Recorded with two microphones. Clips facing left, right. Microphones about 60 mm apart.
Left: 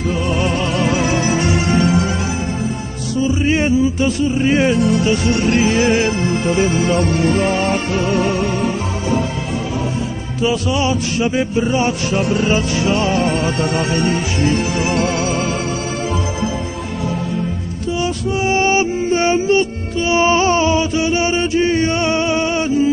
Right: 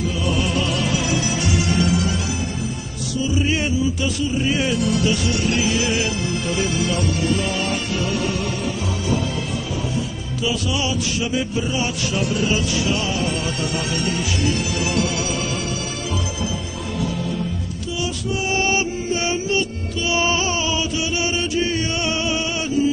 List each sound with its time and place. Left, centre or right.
0.3 s music: left
3.2 s speech: left
9.9 s music: left
18.5 s music: left
20.1 s chant: left